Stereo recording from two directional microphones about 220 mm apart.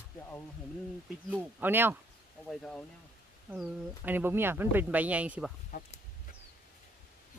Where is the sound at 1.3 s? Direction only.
10° right (ahead or behind).